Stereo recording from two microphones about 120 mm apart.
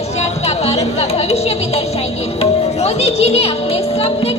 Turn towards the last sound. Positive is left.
turn(degrees=55)  # may be behind; listen again after turning